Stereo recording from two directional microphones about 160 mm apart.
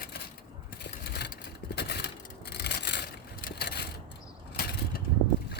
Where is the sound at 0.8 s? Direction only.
90° left.